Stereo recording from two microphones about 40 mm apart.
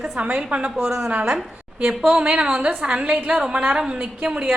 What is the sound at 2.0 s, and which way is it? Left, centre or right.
Speech, right.